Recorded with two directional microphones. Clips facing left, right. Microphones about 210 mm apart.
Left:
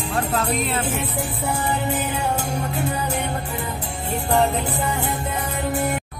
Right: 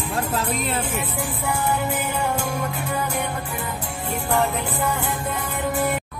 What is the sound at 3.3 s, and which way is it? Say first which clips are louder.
Music: left 2 dB; 20° left (ahead or behind).